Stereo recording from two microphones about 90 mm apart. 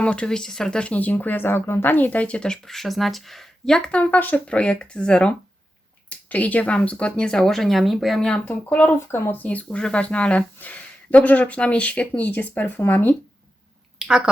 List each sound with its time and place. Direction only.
0.0 s speech: 10° left (ahead or behind)
14.0 s speech: 10° right (ahead or behind)